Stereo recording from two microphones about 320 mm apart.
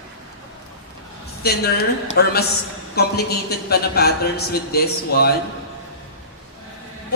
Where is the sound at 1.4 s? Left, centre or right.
Left.